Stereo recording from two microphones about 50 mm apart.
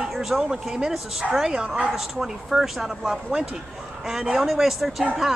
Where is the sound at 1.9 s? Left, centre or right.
Centre.